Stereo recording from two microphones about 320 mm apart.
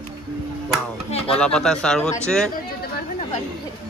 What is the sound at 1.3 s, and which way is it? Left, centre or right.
Speech, centre.